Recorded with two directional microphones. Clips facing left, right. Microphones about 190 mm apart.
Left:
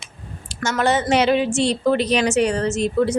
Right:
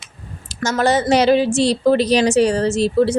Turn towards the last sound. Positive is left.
turn(degrees=-30)  # may be behind; listen again after turning